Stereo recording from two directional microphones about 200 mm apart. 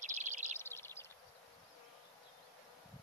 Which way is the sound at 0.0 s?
35° right (ahead or behind).